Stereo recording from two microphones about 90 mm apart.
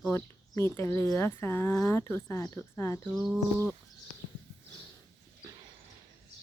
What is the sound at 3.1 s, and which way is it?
Speech, 5° left (ahead or behind).